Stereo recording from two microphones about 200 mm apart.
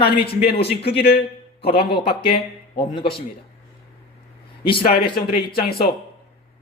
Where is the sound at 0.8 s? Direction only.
55° left (ahead or behind).